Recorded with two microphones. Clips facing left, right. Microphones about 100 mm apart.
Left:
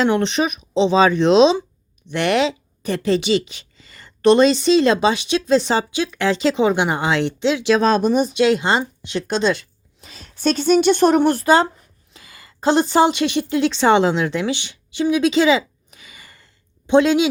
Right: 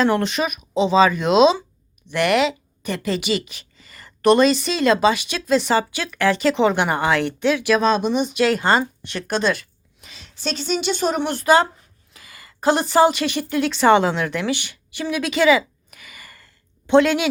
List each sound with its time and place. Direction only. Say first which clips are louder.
0.0 s a woman's voice: left 1 dB; 25° left (ahead or behind)
7.8 s speech: left 3 dB; 40° left (ahead or behind)
8.4 s a woman's voice: left 1 dB; 25° left (ahead or behind)
10.1 s speech: left 8 dB; 45° left (ahead or behind)
11.4 s a woman's voice: left 1 dB; 30° left (ahead or behind)